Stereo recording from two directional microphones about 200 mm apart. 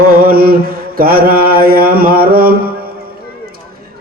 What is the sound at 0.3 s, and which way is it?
Mantra, 50° right (ahead or behind).